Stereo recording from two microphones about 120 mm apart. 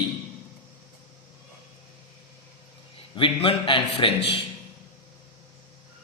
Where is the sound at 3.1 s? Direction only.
45° left (ahead or behind).